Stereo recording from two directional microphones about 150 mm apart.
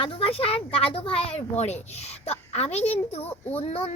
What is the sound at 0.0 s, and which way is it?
Speech, 40° left (ahead or behind).